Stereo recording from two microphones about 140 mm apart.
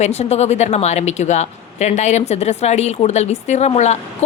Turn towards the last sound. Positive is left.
turn(degrees=55)  # may be behind; listen again after turning